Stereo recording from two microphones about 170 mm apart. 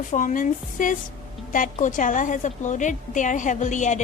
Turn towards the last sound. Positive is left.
turn(degrees=45)  # may be behind; listen again after turning